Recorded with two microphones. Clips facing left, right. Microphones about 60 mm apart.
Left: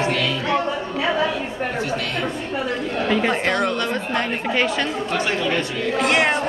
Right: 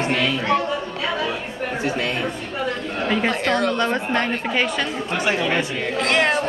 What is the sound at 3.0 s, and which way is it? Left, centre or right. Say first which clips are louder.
Speech: even; centre.